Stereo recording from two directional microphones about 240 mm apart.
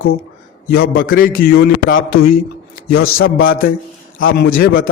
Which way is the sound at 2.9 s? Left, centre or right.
Left.